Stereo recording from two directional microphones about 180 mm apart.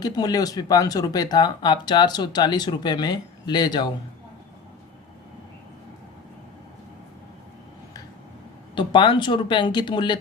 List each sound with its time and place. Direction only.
0.0 s speech: 20° left (ahead or behind)
8.7 s speech: 25° left (ahead or behind)